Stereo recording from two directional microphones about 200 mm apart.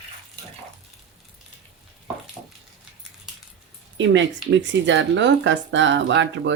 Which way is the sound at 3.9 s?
65° right (ahead or behind).